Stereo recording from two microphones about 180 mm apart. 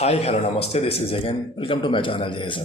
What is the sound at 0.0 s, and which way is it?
Speech, 35° left (ahead or behind).